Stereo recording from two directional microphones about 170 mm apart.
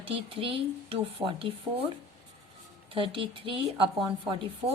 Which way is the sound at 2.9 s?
30° right (ahead or behind).